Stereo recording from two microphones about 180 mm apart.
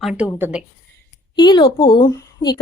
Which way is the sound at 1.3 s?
25° left (ahead or behind).